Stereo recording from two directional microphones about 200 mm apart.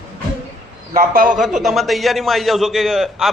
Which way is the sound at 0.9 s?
45° right (ahead or behind).